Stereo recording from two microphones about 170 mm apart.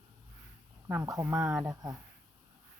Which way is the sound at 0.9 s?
15° right (ahead or behind).